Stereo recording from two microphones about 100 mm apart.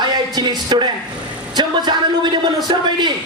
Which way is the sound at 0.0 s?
45° right (ahead or behind).